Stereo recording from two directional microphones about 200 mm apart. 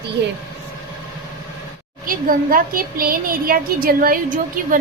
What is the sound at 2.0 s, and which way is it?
A woman's voice, 45° right (ahead or behind).